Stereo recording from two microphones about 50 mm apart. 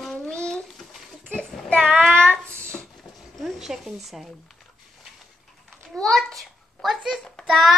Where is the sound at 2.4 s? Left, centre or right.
Left.